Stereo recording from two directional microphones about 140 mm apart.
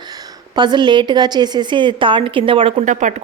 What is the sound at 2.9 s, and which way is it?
Speech, 60° right (ahead or behind).